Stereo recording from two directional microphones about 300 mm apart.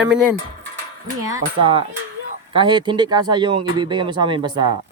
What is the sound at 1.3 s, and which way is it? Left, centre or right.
Speech, centre.